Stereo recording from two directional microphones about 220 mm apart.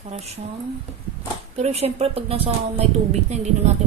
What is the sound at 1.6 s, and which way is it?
A woman's voice, 30° right (ahead or behind).